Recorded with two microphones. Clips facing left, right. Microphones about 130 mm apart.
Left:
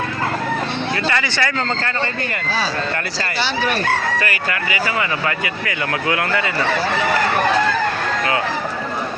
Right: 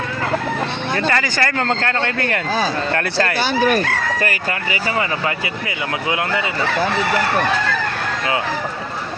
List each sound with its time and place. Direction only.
0.9 s speech: 40° right (ahead or behind)
5.6 s speech: 15° right (ahead or behind)